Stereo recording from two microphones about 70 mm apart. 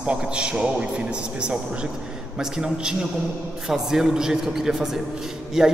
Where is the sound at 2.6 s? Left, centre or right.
Centre.